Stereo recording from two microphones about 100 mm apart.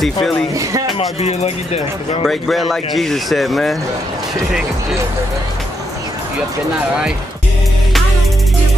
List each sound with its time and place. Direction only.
0.0 s speech: centre (ahead or behind)
1.2 s speech: 90° left
2.2 s speech: centre (ahead or behind)